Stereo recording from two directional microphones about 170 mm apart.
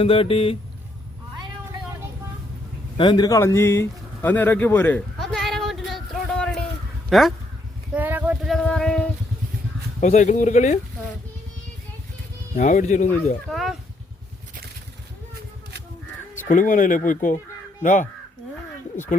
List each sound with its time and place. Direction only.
0.0 s speech: 30° left (ahead or behind)
3.0 s a sound: 25° left (ahead or behind); by 6.6 s 5° left (ahead or behind)
7.1 s speech: centre (ahead or behind)
7.9 s a sound: 10° right (ahead or behind)
8.4 s a sound: 5° left (ahead or behind)
10.0 s speech: 45° left (ahead or behind)
12.5 s speech: 50° left (ahead or behind)
13.5 s speech: centre (ahead or behind)
16.3 s speech: 50° left (ahead or behind)